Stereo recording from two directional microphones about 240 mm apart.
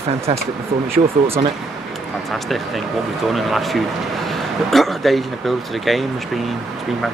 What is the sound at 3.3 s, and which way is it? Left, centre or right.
Speech, centre.